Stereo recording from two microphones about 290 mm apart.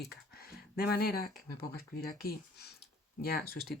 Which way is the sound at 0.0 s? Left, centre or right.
Left.